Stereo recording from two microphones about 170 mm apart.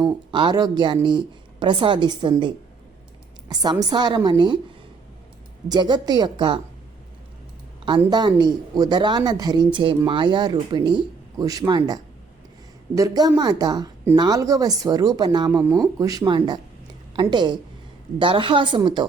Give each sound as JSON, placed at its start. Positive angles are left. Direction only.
{"t": 0.0, "sound": "speech", "side_deg": -25}
{"t": 3.5, "sound": "speech", "side_deg": -25}
{"t": 5.6, "sound": "speech", "side_deg": -25}
{"t": 7.9, "sound": "speech", "side_deg": -25}
{"t": 12.9, "sound": "speech", "side_deg": -20}